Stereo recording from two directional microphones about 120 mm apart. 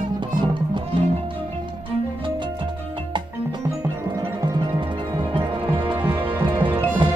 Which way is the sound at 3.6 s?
25° right (ahead or behind).